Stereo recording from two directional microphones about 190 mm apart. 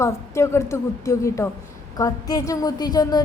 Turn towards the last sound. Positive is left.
turn(degrees=20)  # may be behind; listen again after turning